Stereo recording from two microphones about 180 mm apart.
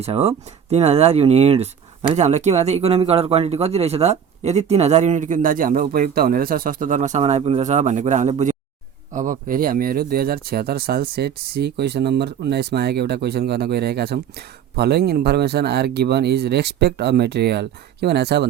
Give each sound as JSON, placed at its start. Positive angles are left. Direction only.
{"t": 0.0, "sound": "speech", "side_deg": -35}